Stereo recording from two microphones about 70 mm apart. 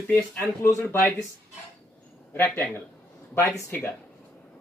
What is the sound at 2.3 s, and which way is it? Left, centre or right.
Speech, left.